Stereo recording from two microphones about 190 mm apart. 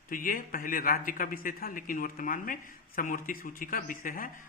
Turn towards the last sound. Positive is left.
turn(degrees=50)  # may be behind; listen again after turning